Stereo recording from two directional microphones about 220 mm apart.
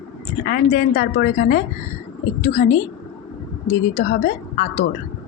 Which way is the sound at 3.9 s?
40° left (ahead or behind).